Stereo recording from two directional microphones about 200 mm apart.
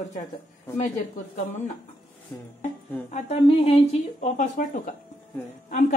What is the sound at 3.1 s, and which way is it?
Speech, 35° left (ahead or behind).